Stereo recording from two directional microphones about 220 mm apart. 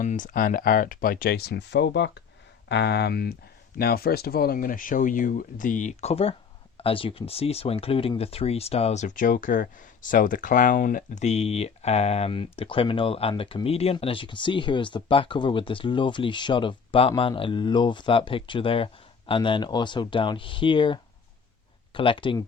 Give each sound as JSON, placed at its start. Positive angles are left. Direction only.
{"t": 0.0, "sound": "speech", "side_deg": 35}